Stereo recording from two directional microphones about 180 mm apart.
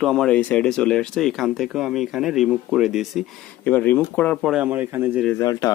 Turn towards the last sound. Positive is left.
turn(degrees=20)  # may be behind; listen again after turning